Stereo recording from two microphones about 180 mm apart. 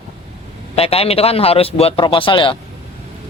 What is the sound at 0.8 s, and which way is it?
Speech, 35° left (ahead or behind).